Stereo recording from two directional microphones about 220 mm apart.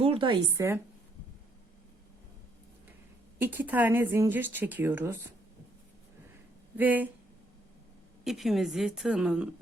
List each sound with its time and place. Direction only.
0.0 s a woman's voice: 25° right (ahead or behind)
3.3 s speech: 10° right (ahead or behind)
6.7 s speech: 10° right (ahead or behind)
8.2 s a woman's voice: centre (ahead or behind)